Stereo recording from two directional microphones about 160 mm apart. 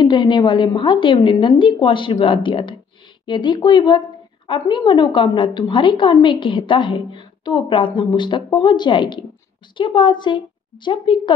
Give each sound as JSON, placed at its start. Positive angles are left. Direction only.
{"t": 0.0, "sound": "a woman's voice", "side_deg": 30}